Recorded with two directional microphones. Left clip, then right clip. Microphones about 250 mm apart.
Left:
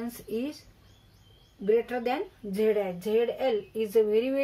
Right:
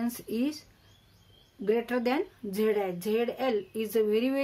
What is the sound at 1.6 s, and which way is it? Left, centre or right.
Speech, right.